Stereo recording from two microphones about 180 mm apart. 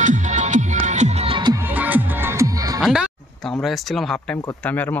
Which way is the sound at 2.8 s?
Centre (ahead or behind).